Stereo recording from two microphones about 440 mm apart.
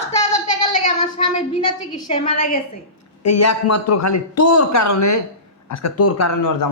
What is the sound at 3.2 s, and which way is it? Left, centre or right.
A man's voice, left.